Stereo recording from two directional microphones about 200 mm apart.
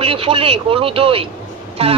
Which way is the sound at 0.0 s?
25° right (ahead or behind).